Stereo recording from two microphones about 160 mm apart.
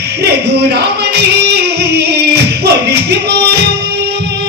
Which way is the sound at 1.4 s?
90° right.